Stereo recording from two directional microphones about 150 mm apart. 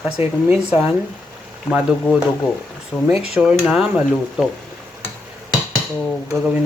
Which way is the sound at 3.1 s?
5° right (ahead or behind).